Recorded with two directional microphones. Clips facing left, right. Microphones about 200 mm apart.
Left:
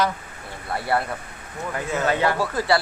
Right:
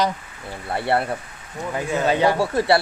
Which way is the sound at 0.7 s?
30° right (ahead or behind).